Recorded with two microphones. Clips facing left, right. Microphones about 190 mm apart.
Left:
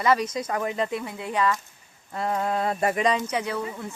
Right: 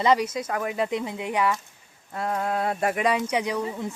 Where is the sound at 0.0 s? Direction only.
15° right (ahead or behind).